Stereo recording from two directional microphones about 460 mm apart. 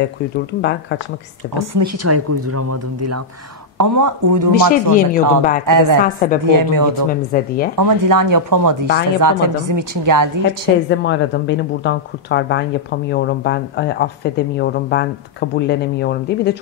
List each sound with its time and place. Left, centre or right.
0.6 s speech: left
1.6 s speech: right
4.6 s speech: centre
5.7 s speech: right
6.0 s speech: centre
6.5 s speech: right
7.1 s speech: centre
7.8 s speech: right
10.9 s speech: left